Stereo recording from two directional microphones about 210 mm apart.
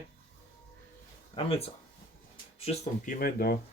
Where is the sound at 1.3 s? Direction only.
30° left (ahead or behind); by 3.6 s 45° left (ahead or behind).